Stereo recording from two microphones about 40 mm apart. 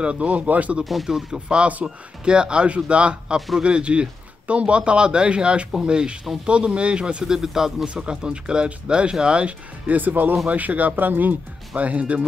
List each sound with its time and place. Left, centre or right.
0.0 s speech: right
1.0 s speech: centre
1.8 s a man's voice: right
3.3 s speech: centre
3.6 s a man's voice: right
7.2 s speech: centre
7.8 s a man's voice: right
9.8 s speech: right
11.7 s speech: right